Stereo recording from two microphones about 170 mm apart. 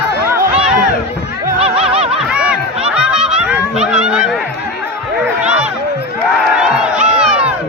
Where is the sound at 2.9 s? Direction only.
5° right (ahead or behind).